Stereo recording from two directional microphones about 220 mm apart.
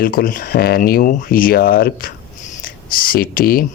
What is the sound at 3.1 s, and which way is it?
Speech, 40° left (ahead or behind).